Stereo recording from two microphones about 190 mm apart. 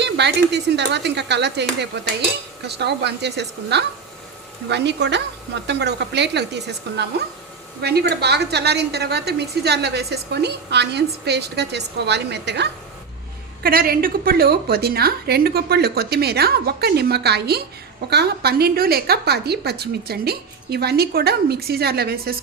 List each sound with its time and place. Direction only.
0.0 s a woman's voice: 65° right (ahead or behind)
13.6 s a woman's voice: 50° right (ahead or behind)